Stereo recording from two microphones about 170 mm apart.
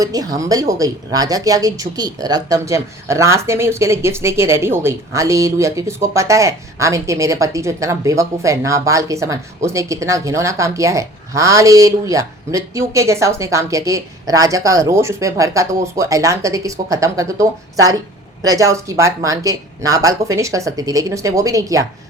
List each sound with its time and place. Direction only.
0.0 s a woman's voice: 20° right (ahead or behind)